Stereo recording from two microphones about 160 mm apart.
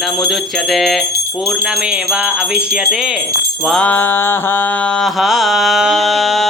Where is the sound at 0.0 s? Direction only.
Centre (ahead or behind).